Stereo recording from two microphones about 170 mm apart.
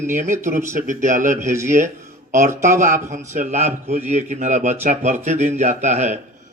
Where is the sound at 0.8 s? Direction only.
50° right (ahead or behind).